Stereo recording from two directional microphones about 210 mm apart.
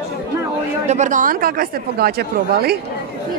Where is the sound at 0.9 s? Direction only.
35° right (ahead or behind).